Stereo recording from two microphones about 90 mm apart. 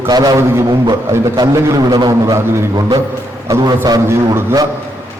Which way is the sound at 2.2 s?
35° right (ahead or behind).